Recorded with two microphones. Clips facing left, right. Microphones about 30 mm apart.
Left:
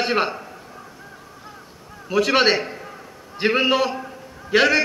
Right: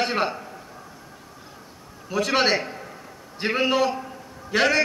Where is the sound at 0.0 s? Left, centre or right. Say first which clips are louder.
Left 3 dB; centre.